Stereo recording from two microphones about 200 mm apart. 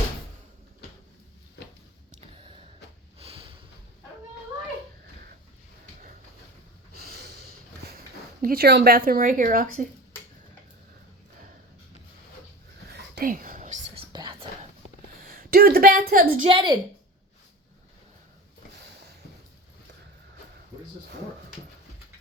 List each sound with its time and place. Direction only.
3.2 s a sound: 30° right (ahead or behind)
6.9 s snort: 50° right (ahead or behind)
7.9 s speech: 50° right (ahead or behind)
13.1 s whispering: 45° right (ahead or behind)
13.9 s whispering: 25° right (ahead or behind)
15.2 s a sound: 45° right (ahead or behind)
16.5 s a woman's voice: 20° right (ahead or behind)